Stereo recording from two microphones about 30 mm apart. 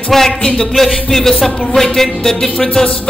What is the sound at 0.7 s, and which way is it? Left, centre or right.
Speech, centre.